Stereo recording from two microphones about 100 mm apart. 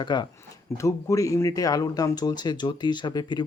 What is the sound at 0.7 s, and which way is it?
Speech, 30° left (ahead or behind).